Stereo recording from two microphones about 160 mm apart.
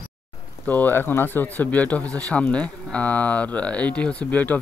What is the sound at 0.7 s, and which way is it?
Speech, 10° left (ahead or behind).